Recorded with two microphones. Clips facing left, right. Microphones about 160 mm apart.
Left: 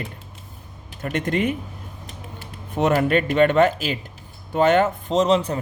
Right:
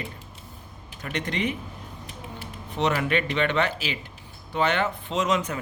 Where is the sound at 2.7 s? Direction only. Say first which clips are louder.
Left 6 dB; 45° left (ahead or behind).